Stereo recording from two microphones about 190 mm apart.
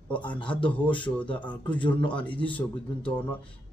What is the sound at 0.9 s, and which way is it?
Speech, 25° left (ahead or behind).